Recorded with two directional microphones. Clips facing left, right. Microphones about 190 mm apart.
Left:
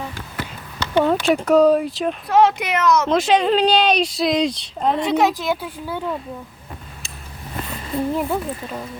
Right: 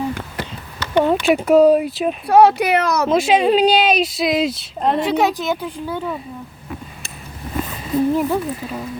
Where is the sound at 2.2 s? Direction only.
35° right (ahead or behind).